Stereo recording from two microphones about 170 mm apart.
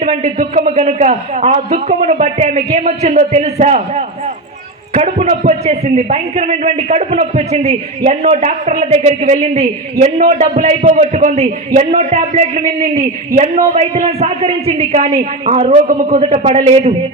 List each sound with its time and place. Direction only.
0.3 s a man's voice: 50° right (ahead or behind)
10.8 s a man's voice: 50° right (ahead or behind)
13.6 s a man's voice: 50° right (ahead or behind)